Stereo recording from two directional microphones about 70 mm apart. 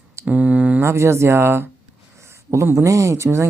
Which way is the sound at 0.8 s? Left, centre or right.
Right.